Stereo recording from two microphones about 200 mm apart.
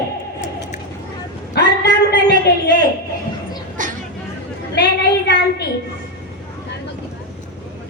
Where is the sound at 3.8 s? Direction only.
40° right (ahead or behind).